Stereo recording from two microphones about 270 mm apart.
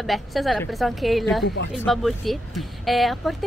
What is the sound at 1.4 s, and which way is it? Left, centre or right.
Speech, left.